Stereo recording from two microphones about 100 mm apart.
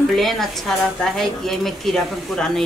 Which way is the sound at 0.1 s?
Centre (ahead or behind).